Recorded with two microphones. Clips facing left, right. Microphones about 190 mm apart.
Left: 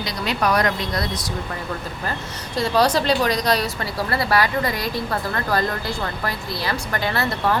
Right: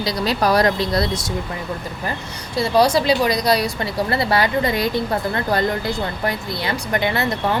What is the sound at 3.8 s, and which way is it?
A woman's voice, 25° right (ahead or behind).